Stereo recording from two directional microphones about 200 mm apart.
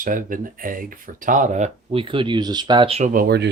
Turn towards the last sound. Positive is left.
turn(degrees=-50)  # may be behind; listen again after turning